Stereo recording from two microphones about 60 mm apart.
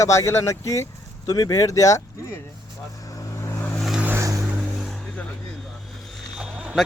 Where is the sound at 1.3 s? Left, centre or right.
Left.